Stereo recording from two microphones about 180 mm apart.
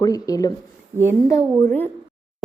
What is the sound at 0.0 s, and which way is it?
A woman's voice, 20° left (ahead or behind).